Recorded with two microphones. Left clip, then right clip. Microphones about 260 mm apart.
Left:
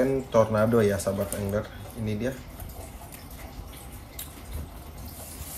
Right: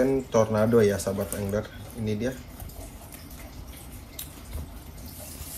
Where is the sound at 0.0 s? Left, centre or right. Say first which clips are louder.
Even; centre.